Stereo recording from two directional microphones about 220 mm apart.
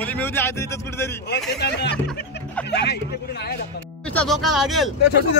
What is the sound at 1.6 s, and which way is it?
Speech, 50° left (ahead or behind).